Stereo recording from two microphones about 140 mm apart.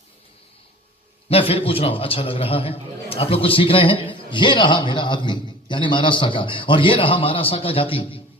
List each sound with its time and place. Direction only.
1.3 s a man's voice: 45° left (ahead or behind)